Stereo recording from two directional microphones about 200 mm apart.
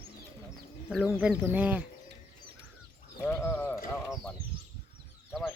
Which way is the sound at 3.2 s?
5° left (ahead or behind).